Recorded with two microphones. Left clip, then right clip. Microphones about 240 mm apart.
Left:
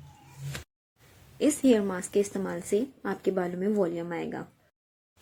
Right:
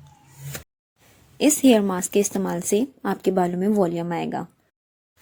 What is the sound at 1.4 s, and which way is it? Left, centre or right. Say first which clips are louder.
Speech: right 6 dB; right.